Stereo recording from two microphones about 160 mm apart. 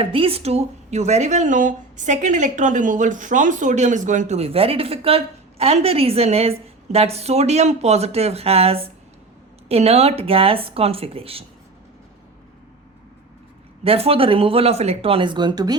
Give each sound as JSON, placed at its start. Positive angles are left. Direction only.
{"t": 0.0, "sound": "speech", "side_deg": -35}
{"t": 13.8, "sound": "speech", "side_deg": -40}